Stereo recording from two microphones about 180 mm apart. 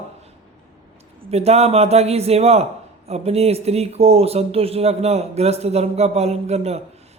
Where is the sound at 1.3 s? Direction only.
35° right (ahead or behind).